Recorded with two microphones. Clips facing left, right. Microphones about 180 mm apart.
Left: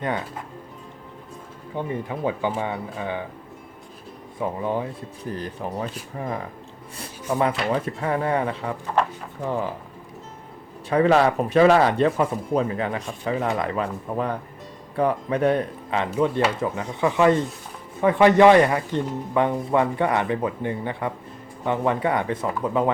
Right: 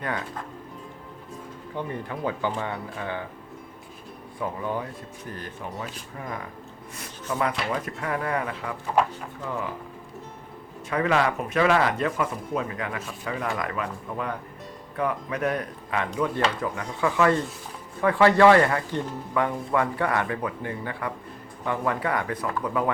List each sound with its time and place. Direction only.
1.7 s speech: 15° left (ahead or behind)
4.4 s speech: 25° left (ahead or behind)
5.3 s speech: 35° left (ahead or behind)
7.0 s a sound: 30° left (ahead or behind)
7.7 s speech: 30° left (ahead or behind)
10.8 s speech: 30° left (ahead or behind)